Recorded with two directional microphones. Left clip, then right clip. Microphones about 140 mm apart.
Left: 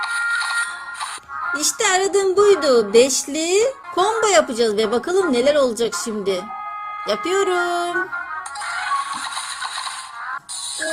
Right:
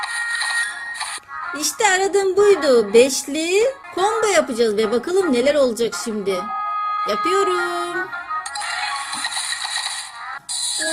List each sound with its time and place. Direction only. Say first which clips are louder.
0.0 s music: left 2 dB; 25° right (ahead or behind)
1.5 s speech: right 1 dB; centre (ahead or behind)